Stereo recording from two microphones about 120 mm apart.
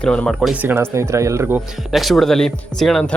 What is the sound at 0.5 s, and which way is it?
Speech, 20° right (ahead or behind).